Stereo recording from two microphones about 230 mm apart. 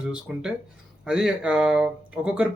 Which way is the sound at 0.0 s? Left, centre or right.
Centre.